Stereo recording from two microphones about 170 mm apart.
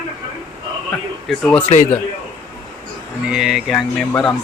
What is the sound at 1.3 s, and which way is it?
Speech, 5° left (ahead or behind).